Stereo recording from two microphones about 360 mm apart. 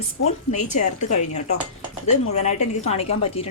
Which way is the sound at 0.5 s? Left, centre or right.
Centre.